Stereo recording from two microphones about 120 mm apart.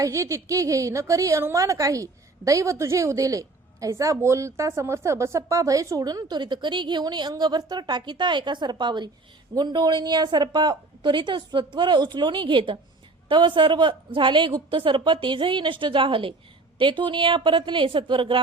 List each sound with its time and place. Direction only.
0.0 s a woman's voice: 25° right (ahead or behind); by 18.3 s 45° right (ahead or behind)